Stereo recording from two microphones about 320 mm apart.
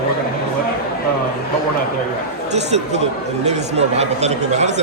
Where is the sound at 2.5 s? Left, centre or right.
Right.